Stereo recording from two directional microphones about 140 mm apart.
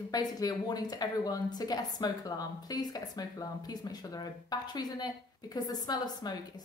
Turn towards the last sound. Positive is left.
turn(degrees=30)  # may be behind; listen again after turning